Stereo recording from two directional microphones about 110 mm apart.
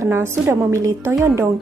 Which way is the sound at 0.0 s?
25° right (ahead or behind).